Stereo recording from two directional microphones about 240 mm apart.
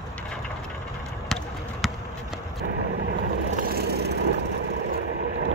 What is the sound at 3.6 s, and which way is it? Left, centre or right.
Vehicle, right.